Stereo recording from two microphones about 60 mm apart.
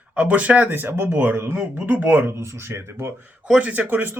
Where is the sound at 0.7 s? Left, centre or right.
Right.